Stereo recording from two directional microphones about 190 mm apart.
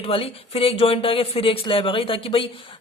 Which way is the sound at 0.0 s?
30° left (ahead or behind).